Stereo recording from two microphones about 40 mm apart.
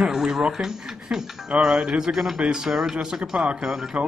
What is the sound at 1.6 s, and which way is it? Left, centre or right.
Speech, centre.